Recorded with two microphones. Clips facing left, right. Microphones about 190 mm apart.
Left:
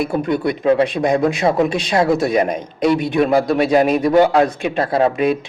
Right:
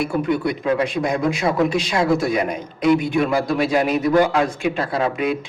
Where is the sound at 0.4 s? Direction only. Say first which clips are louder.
Left 5 dB; 30° left (ahead or behind).